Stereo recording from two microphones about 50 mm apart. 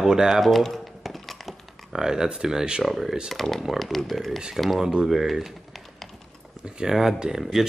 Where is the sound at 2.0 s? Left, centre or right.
Centre.